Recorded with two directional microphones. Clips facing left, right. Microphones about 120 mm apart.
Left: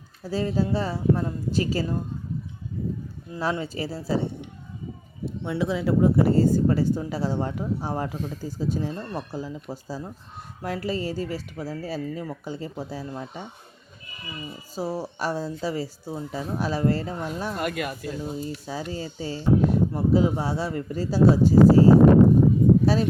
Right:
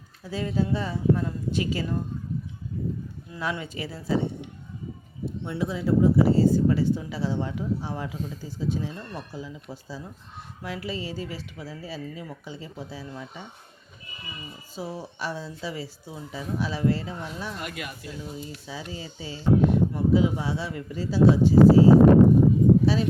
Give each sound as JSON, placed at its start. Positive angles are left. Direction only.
{"t": 0.3, "sound": "a woman's voice", "side_deg": 35}
{"t": 3.3, "sound": "a woman's voice", "side_deg": 30}
{"t": 5.2, "sound": "speech", "side_deg": 90}
{"t": 14.8, "sound": "speech", "side_deg": 40}